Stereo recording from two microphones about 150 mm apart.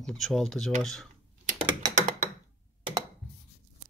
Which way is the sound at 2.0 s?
55° right (ahead or behind).